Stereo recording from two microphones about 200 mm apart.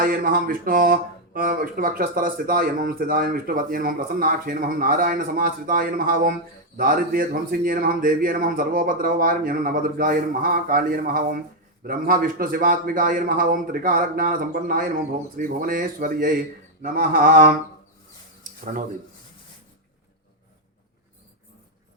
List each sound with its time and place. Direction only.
0.0 s speech: 45° right (ahead or behind)